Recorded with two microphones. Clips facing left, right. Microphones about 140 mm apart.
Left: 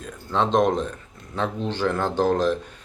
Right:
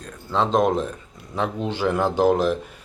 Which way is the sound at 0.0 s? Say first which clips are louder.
Right 1 dB; centre (ahead or behind).